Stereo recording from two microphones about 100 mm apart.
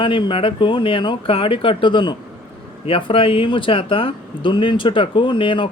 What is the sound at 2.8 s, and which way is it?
Speech, 65° left (ahead or behind).